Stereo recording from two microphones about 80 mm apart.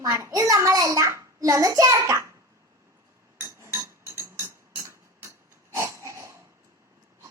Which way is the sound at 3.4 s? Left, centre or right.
Right.